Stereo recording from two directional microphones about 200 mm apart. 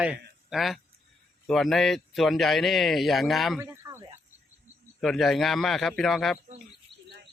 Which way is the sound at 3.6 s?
15° right (ahead or behind).